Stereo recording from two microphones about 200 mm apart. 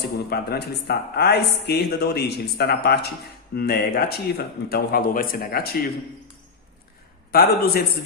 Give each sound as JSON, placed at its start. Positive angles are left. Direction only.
{"t": 0.0, "sound": "speech", "side_deg": 50}
{"t": 7.3, "sound": "speech", "side_deg": 50}